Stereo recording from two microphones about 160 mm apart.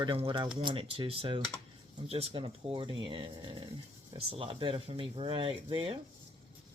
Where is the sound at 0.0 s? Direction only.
30° right (ahead or behind).